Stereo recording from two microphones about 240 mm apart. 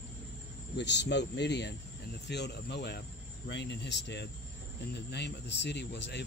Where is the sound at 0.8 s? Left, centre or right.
Left.